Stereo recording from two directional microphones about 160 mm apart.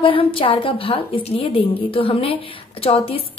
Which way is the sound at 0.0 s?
35° left (ahead or behind).